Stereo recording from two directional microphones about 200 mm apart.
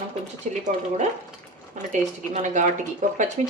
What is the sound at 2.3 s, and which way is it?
Speech, 35° right (ahead or behind).